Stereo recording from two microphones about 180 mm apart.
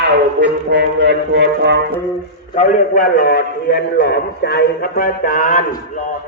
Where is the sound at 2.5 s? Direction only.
50° left (ahead or behind).